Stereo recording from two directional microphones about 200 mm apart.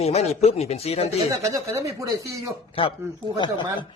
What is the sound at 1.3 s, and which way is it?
Speech, 15° right (ahead or behind).